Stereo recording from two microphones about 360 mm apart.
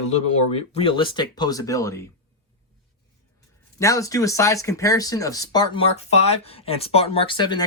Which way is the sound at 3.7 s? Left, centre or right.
Centre.